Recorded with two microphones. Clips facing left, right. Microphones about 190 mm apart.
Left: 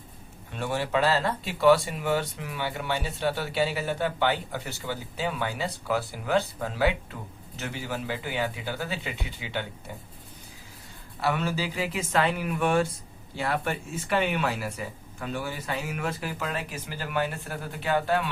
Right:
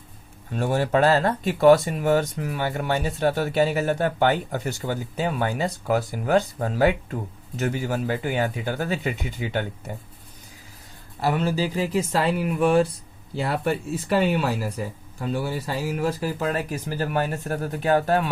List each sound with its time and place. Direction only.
0.5 s speech: 45° right (ahead or behind)
11.2 s speech: 35° right (ahead or behind)